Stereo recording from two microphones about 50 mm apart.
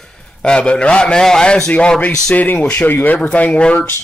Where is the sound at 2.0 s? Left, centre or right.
Left.